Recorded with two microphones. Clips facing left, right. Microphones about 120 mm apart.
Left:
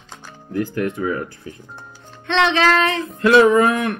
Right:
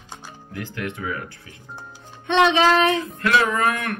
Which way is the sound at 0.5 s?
30° left (ahead or behind).